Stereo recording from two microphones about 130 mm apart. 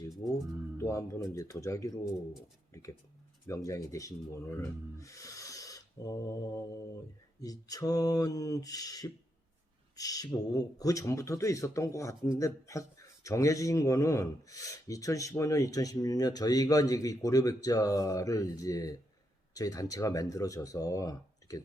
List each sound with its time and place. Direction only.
0.8 s speech: 25° left (ahead or behind)
3.4 s speech: 25° left (ahead or behind)
7.4 s speech: 30° left (ahead or behind)